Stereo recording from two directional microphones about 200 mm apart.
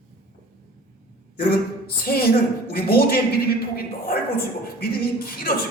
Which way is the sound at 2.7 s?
50° left (ahead or behind).